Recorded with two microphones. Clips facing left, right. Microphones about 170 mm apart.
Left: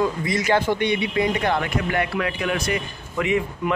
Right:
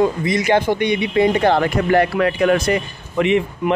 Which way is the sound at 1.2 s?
30° right (ahead or behind).